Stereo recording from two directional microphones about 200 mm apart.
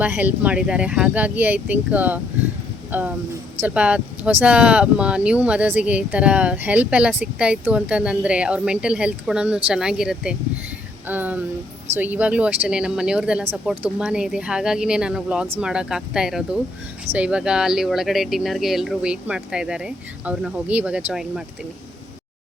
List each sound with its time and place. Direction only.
0.0 s speech: 10° right (ahead or behind)
11.0 s music: 10° right (ahead or behind)
11.9 s speech: 10° right (ahead or behind)